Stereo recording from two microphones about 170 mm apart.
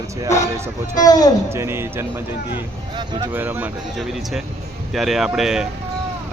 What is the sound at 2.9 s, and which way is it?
Speech, 25° right (ahead or behind).